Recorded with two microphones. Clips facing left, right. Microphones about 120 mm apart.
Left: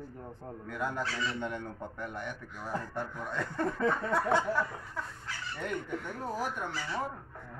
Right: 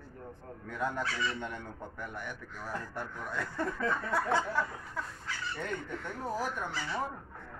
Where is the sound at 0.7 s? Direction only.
10° left (ahead or behind).